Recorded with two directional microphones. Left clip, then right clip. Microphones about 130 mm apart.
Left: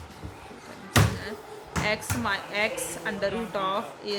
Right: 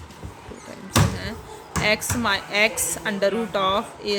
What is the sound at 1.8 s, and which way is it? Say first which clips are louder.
A woman's voice: right 6 dB; 45° right (ahead or behind).